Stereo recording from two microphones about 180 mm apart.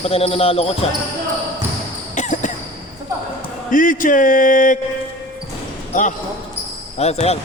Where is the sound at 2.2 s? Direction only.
45° left (ahead or behind).